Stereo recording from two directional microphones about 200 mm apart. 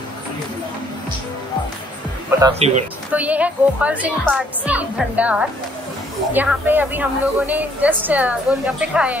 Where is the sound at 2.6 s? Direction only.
35° right (ahead or behind).